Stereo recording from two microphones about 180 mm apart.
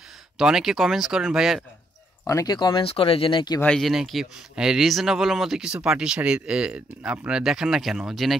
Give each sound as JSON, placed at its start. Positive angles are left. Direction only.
{"t": 0.4, "sound": "speech", "side_deg": 0}
{"t": 2.2, "sound": "speech", "side_deg": 20}
{"t": 3.6, "sound": "speech", "side_deg": 0}